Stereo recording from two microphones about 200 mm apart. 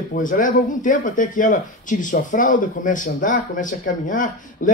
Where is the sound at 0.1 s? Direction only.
40° left (ahead or behind).